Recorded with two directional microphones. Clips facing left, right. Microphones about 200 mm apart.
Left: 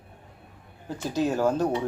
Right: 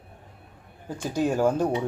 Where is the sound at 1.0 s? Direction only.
15° right (ahead or behind).